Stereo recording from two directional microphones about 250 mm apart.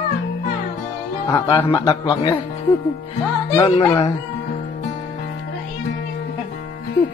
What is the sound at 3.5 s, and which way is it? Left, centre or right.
Snicker, centre.